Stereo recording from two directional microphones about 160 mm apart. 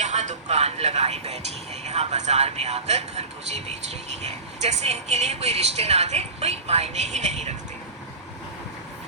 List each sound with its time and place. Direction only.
0.0 s vehicle: 45° right (ahead or behind)
4.2 s a woman's voice: 45° right (ahead or behind)